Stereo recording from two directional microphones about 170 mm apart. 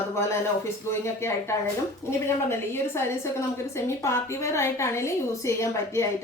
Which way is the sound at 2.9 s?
15° left (ahead or behind).